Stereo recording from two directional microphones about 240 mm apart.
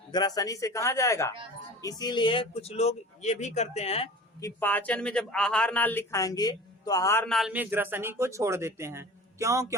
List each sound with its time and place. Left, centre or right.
0.1 s speech: centre
4.4 s speech: centre